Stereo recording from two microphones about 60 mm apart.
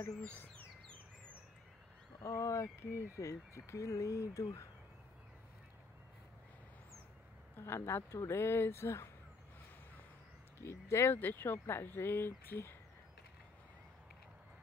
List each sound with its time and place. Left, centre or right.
2.2 s speech: left
7.5 s speech: left
10.6 s speech: left
11.1 s speech: left